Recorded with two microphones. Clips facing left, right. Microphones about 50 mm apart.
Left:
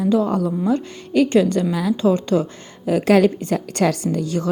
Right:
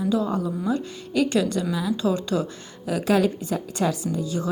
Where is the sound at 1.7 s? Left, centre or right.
Left.